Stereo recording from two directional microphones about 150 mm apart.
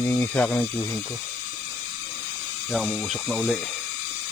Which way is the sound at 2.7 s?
Centre (ahead or behind).